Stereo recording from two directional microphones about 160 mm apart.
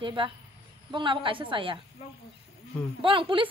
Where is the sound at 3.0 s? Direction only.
35° right (ahead or behind).